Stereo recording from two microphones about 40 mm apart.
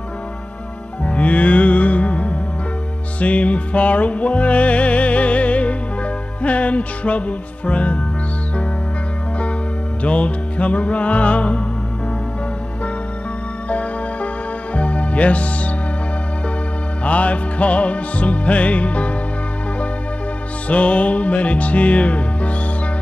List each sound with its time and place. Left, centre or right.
1.0 s music: left
10.0 s music: left
13.7 s music: left
17.0 s music: left
20.6 s music: left